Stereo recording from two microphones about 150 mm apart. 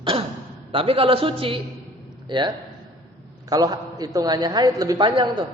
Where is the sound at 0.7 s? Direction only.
40° right (ahead or behind).